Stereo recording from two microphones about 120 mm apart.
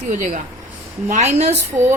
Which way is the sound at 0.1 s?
90° right.